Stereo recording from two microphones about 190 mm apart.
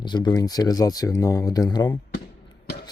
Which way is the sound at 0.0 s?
25° left (ahead or behind).